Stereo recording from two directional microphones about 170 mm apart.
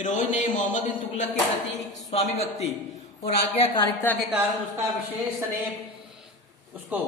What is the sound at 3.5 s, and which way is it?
Speech, 30° left (ahead or behind).